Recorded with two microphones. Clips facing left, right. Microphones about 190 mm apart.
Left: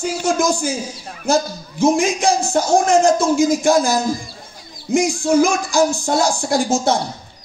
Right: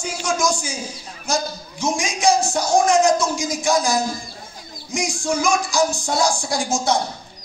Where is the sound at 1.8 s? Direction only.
55° left (ahead or behind).